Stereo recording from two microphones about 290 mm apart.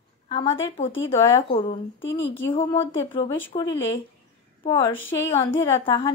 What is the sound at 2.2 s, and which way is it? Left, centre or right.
Speech, left.